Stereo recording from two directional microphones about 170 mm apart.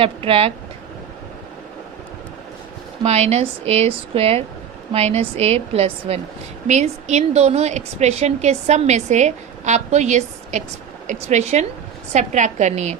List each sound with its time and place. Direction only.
0.0 s a woman's voice: 35° right (ahead or behind)
3.0 s a woman's voice: 40° right (ahead or behind)